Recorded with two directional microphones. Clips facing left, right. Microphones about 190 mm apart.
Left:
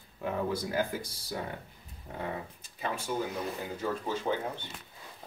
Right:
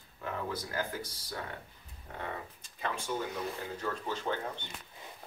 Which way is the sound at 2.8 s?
5° left (ahead or behind).